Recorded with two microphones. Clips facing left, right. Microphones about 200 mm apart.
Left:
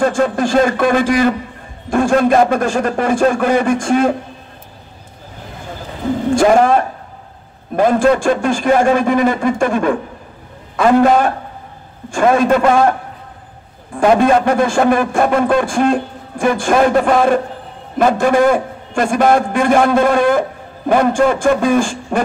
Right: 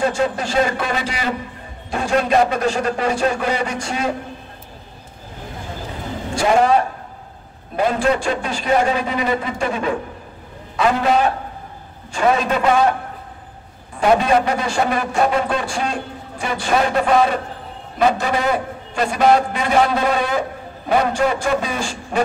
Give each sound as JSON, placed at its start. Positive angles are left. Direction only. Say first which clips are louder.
{"t": 0.0, "sound": "a man's voice", "louder": "left 5 dB", "side_deg": 50}
{"t": 6.3, "sound": "a man's voice", "louder": "left 4 dB", "side_deg": 50}
{"t": 13.9, "sound": "a man's voice", "louder": "left 4 dB", "side_deg": 50}